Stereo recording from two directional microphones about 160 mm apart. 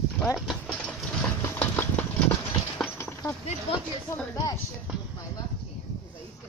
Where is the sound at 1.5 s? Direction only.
10° left (ahead or behind).